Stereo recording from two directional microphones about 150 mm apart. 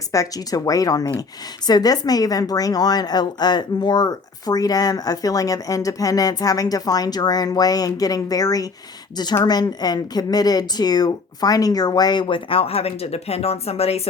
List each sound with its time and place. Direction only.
0.1 s a woman's voice: 25° left (ahead or behind); by 14.1 s 45° left (ahead or behind)